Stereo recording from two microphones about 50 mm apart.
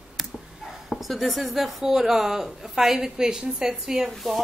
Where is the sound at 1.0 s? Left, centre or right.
Centre.